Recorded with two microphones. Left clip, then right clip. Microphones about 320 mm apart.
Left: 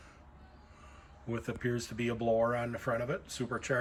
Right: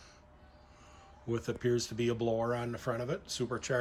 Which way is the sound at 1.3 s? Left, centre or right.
Centre.